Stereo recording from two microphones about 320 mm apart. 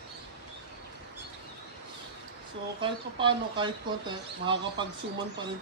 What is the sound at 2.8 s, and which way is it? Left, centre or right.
Speech, centre.